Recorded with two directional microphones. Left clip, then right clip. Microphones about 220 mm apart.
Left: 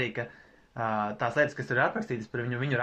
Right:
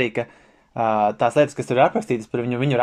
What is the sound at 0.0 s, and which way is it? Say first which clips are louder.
Speech: right 9 dB; 25° right (ahead or behind).